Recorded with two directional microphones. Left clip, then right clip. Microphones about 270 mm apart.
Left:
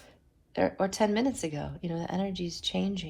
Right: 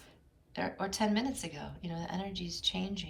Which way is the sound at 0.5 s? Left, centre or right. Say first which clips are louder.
Left 8 dB; left.